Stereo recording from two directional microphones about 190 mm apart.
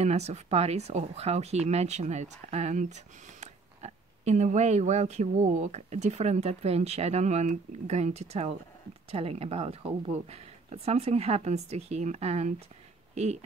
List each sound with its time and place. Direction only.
0.0 s speech: 35° right (ahead or behind)